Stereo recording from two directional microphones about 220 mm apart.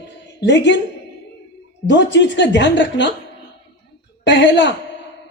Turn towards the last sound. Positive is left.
turn(degrees=55)  # may be behind; listen again after turning